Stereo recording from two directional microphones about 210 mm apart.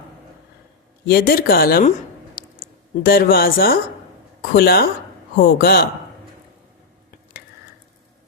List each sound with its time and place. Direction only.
1.0 s speech: 45° left (ahead or behind)
2.3 s a sound: 45° left (ahead or behind)
4.5 s speech: 45° left (ahead or behind)